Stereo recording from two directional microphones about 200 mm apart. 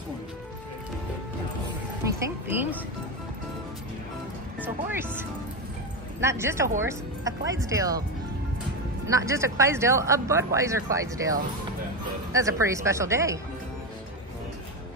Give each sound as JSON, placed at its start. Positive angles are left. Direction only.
{"t": 2.0, "sound": "a man's voice", "side_deg": -15}
{"t": 6.2, "sound": "a man's voice", "side_deg": -15}
{"t": 9.0, "sound": "a man's voice", "side_deg": -15}